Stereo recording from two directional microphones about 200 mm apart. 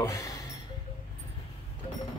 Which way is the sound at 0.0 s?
15° left (ahead or behind).